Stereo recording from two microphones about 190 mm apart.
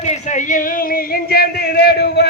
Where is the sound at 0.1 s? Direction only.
40° left (ahead or behind).